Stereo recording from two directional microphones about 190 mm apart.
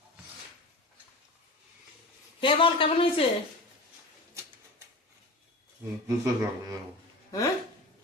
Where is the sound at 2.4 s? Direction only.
25° left (ahead or behind).